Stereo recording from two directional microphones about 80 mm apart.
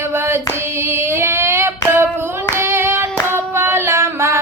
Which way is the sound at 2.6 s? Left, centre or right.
Right.